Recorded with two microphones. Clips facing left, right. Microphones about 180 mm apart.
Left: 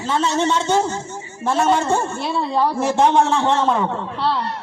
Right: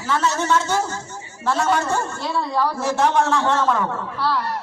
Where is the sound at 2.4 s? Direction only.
15° left (ahead or behind).